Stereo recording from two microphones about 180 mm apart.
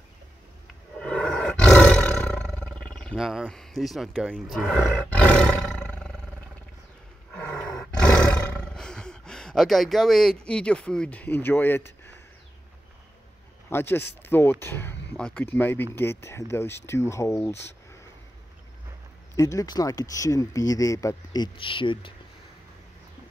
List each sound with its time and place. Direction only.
1.0 s roar: 5° left (ahead or behind)
7.3 s roaring cats: 5° left (ahead or behind)
8.4 s speech: 5° left (ahead or behind)
13.7 s speech: 10° left (ahead or behind)
19.3 s speech: 20° left (ahead or behind)